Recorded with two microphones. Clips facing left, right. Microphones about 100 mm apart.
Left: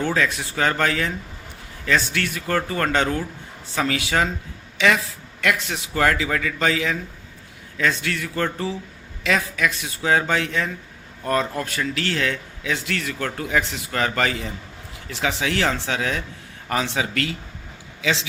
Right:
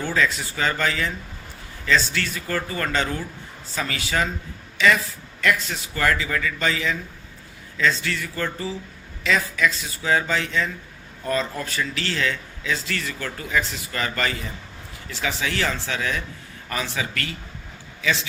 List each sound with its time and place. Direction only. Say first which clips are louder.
0.0 s speech: left 1 dB; 65° left (ahead or behind)
2.1 s speech: left 3 dB; 65° left (ahead or behind)
3.8 s speech: left 4 dB; 80° left
5.4 s speech: even; 75° left (ahead or behind)
7.8 s speech: even; 65° left (ahead or behind)
12.8 s a man's voice: left 3 dB; 75° left (ahead or behind)